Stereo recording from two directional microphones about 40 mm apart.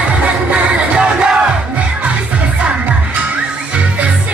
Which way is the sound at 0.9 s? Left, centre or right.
Right.